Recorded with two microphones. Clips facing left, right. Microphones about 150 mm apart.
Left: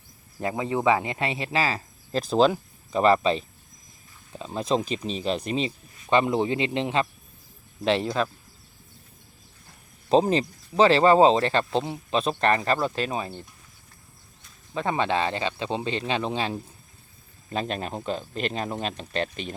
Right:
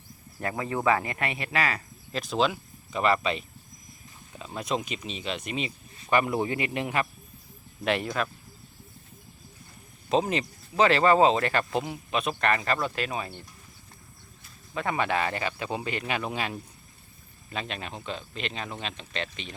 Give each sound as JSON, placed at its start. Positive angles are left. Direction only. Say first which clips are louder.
{"t": 0.3, "sound": "speech", "louder": "left 4 dB", "side_deg": 20}
{"t": 10.1, "sound": "speech", "louder": "left 5 dB", "side_deg": 35}
{"t": 14.8, "sound": "speech", "louder": "left 3 dB", "side_deg": 25}
{"t": 17.5, "sound": "speech", "louder": "left 6 dB", "side_deg": 40}